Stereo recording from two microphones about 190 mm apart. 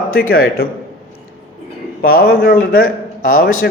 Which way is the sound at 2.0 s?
50° left (ahead or behind).